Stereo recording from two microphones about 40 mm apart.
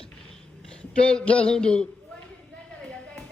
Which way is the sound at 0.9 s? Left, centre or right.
Left.